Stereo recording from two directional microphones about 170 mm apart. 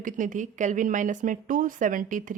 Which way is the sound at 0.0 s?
50° right (ahead or behind).